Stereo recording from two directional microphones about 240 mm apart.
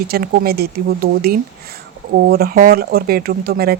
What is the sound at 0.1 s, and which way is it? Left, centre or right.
Speech, right.